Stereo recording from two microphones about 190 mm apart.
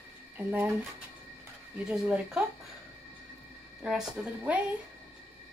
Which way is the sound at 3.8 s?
5° right (ahead or behind).